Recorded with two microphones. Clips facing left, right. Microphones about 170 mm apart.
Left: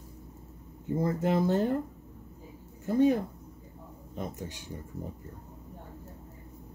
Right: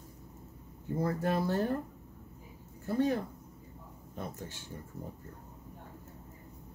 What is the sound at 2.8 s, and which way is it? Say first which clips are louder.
Speech: left 6 dB; 15° left (ahead or behind).